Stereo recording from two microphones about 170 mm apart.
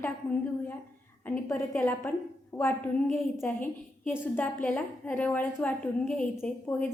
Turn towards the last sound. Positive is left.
turn(degrees=10)  # may be behind; listen again after turning